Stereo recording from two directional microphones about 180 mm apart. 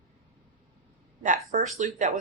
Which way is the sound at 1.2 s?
45° right (ahead or behind).